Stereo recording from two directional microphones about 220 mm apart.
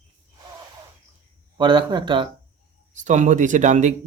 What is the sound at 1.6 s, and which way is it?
Speech, 20° right (ahead or behind).